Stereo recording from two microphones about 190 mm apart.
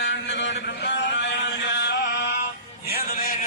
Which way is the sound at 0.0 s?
65° left (ahead or behind).